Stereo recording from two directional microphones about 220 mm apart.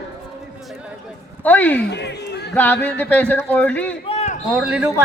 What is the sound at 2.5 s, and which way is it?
Speech, 5° left (ahead or behind).